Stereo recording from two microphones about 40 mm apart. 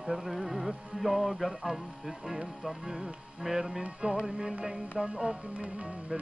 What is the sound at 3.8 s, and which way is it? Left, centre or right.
Music, right.